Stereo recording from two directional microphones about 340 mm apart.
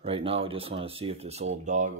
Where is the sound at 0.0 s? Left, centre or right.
Centre.